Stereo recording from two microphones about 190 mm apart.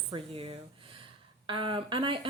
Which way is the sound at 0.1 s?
30° right (ahead or behind).